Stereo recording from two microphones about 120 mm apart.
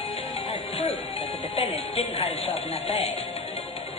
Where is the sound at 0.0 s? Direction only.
60° left (ahead or behind).